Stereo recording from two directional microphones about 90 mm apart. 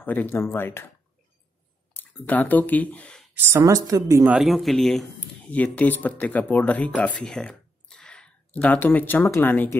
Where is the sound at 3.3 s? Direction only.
30° right (ahead or behind).